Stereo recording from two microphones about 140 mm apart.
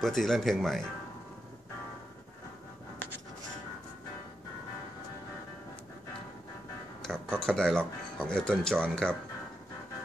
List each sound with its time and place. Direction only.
0.0 s speech: centre (ahead or behind)
7.0 s speech: 5° left (ahead or behind)